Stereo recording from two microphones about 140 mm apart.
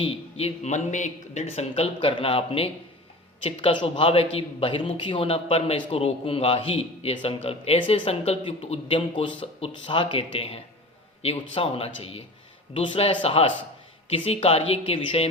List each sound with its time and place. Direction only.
0.0 s speech: 45° left (ahead or behind)